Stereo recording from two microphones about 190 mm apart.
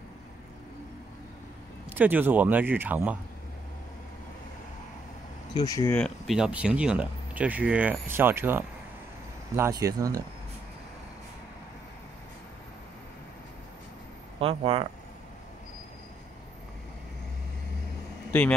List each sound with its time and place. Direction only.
1.9 s speech: 10° right (ahead or behind)
5.5 s speech: 20° left (ahead or behind)
5.9 s speech: centre (ahead or behind); by 10.2 s 20° right (ahead or behind)
14.4 s speech: 30° right (ahead or behind)